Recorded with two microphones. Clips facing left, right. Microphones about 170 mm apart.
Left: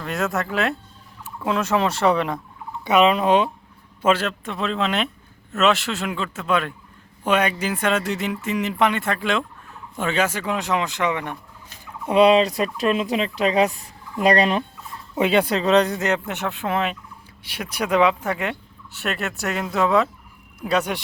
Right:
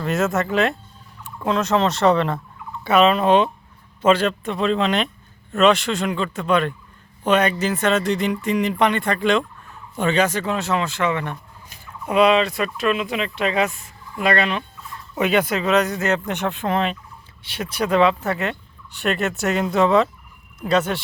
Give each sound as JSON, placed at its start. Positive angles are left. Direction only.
{"t": 0.0, "sound": "speech", "side_deg": 0}
{"t": 12.0, "sound": "speech", "side_deg": 30}
{"t": 16.2, "sound": "speech", "side_deg": 5}